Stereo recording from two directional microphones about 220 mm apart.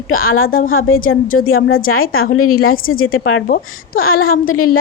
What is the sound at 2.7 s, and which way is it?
Speech, 40° left (ahead or behind).